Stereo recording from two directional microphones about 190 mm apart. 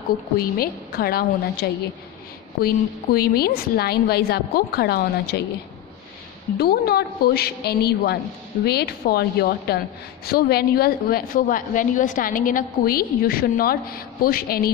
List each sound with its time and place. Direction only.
0.6 s a woman's voice: 50° left (ahead or behind)
6.6 s a woman's voice: 55° left (ahead or behind)